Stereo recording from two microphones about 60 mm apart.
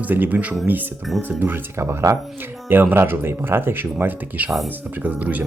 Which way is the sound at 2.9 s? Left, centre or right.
Right.